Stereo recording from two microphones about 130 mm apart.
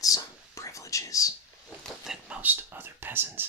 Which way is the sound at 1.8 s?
5° right (ahead or behind).